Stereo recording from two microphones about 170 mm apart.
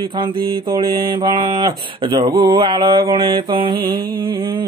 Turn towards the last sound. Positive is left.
turn(degrees=-30)  # may be behind; listen again after turning